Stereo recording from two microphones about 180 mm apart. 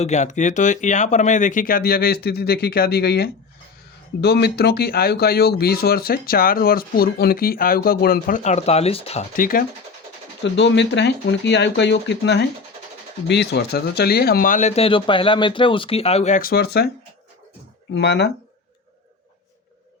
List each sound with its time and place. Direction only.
0.0 s speech: 40° left (ahead or behind)
9.3 s speech: 50° left (ahead or behind)
10.4 s speech: 80° left; by 16.9 s 60° left (ahead or behind)
17.9 s speech: 65° left (ahead or behind)